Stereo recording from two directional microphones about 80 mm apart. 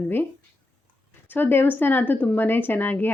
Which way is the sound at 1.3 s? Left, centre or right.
Left.